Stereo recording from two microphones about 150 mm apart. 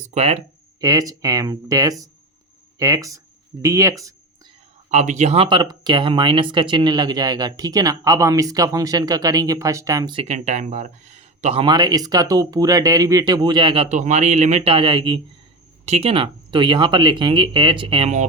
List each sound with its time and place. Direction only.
0.1 s speech: 45° right (ahead or behind)
0.8 s speech: 25° right (ahead or behind)
4.9 s speech: 50° right (ahead or behind); by 10.2 s 30° right (ahead or behind)
10.2 s speech: 50° right (ahead or behind)
11.6 s speech: 30° right (ahead or behind)
13.9 s speech: 50° right (ahead or behind); by 15.2 s 30° right (ahead or behind)
15.9 s speech: 45° right (ahead or behind)